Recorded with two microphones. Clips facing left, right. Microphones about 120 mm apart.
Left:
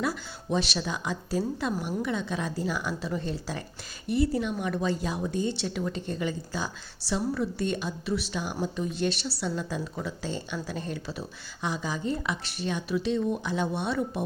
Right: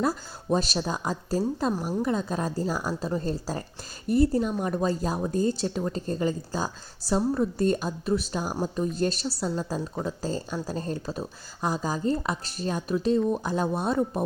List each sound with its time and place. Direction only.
0.0 s a woman's voice: 35° right (ahead or behind)